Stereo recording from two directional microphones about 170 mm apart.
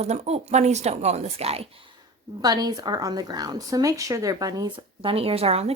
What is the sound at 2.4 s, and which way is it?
A woman's voice, 25° right (ahead or behind).